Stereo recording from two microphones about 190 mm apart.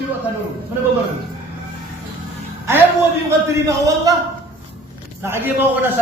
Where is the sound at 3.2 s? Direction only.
15° right (ahead or behind).